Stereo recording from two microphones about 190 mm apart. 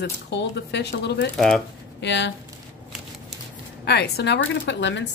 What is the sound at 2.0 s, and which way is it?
Speech, 65° left (ahead or behind).